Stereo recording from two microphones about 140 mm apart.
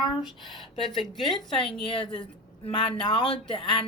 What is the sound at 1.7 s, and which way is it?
Speech, 40° left (ahead or behind).